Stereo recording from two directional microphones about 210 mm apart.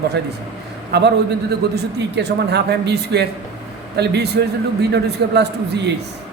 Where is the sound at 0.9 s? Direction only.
50° right (ahead or behind).